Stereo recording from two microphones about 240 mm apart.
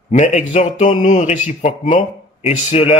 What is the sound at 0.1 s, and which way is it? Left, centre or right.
Speech, left.